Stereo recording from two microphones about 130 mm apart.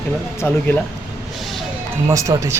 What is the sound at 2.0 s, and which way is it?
Speech, 25° right (ahead or behind).